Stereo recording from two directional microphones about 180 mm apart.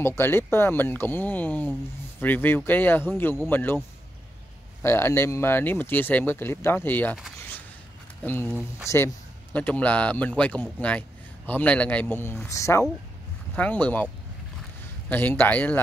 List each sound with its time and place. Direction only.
0.0 s a man's voice: 15° left (ahead or behind)
4.8 s a man's voice: 15° left (ahead or behind)
8.2 s speech: 10° left (ahead or behind)
8.5 s speech: 5° right (ahead or behind)
8.8 s a man's voice: 15° left (ahead or behind)
15.0 s a man's voice: 10° left (ahead or behind)